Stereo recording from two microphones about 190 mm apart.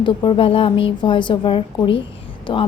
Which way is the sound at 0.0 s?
25° left (ahead or behind).